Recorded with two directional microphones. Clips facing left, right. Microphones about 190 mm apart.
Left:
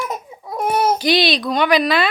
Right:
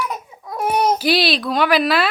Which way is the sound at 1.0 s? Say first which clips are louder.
Left 1 dB; 5° right (ahead or behind).